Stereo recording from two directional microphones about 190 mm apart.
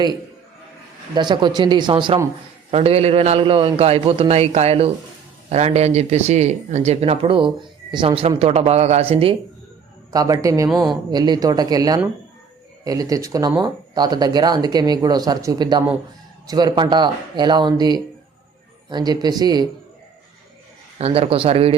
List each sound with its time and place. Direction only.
1.1 s speech: 25° right (ahead or behind)
10.1 s speech: 20° right (ahead or behind)
21.0 s speech: 30° right (ahead or behind)